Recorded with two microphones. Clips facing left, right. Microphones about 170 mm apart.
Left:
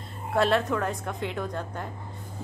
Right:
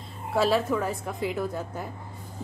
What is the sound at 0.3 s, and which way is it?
A woman's voice, 5° right (ahead or behind).